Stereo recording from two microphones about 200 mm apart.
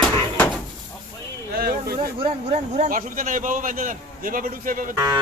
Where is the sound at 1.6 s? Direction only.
50° right (ahead or behind).